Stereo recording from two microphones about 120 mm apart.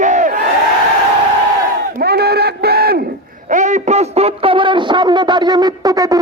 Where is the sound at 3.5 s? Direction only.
90° right.